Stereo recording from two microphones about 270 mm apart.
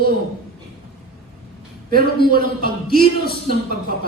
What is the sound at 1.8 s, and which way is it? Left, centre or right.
A man's voice, right.